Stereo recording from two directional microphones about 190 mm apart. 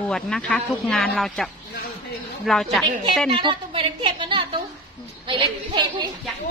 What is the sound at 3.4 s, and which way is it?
A woman's voice, 25° right (ahead or behind).